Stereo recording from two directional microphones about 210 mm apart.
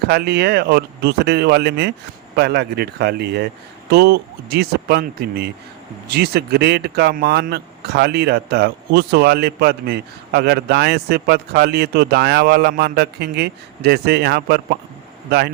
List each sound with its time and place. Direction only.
0.1 s speech: 50° right (ahead or behind)